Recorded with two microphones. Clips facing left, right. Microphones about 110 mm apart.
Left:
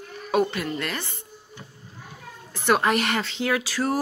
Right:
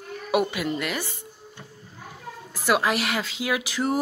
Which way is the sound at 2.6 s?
5° right (ahead or behind).